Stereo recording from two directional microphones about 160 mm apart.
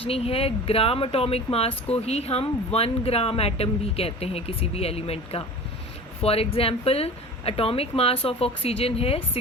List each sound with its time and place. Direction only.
0.0 s speech: 35° left (ahead or behind)